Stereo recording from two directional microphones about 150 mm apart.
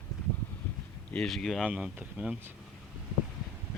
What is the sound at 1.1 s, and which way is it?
Speech, 5° left (ahead or behind).